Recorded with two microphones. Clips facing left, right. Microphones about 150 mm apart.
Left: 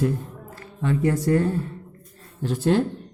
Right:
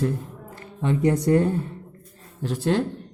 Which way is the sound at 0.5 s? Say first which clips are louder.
Even; 20° right (ahead or behind).